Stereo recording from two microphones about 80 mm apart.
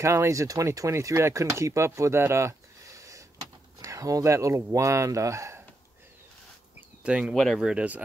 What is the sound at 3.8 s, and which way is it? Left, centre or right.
Speech, right.